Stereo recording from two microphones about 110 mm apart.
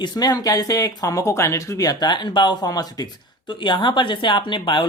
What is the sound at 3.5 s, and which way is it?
Speech, 50° left (ahead or behind).